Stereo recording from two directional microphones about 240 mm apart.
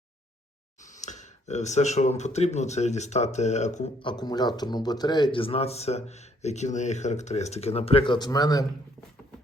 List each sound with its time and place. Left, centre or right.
0.8 s speech: left; by 8.6 s centre